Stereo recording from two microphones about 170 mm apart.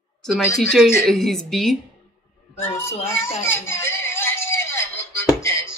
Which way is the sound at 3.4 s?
15° left (ahead or behind).